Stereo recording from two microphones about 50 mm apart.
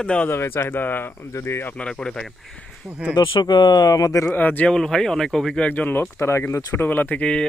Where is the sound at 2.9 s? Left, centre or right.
Right.